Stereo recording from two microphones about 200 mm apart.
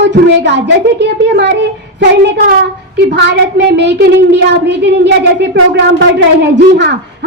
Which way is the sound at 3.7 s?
55° right (ahead or behind).